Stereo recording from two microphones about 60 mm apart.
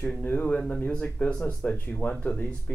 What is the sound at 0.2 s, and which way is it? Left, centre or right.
Speech, left.